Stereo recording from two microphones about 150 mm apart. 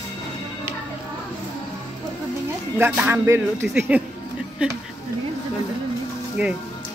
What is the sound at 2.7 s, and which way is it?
Speech, 15° right (ahead or behind).